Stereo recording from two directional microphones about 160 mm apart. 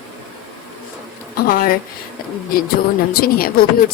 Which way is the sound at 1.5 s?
60° left (ahead or behind).